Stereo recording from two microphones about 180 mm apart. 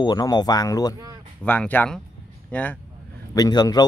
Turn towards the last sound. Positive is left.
turn(degrees=20)  # may be behind; listen again after turning